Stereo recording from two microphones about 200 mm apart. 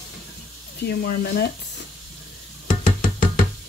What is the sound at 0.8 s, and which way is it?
Speech, 50° left (ahead or behind).